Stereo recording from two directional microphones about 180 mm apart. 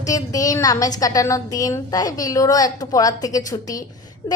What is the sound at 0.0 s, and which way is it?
A woman's voice, 20° left (ahead or behind).